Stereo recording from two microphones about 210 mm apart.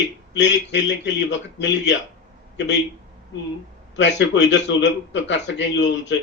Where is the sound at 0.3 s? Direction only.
55° left (ahead or behind).